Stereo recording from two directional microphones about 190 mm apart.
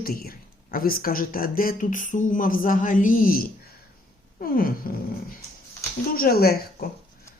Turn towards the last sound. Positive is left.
turn(degrees=55)  # may be behind; listen again after turning